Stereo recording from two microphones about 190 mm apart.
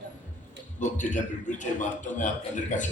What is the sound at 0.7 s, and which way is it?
A man's voice, 40° left (ahead or behind).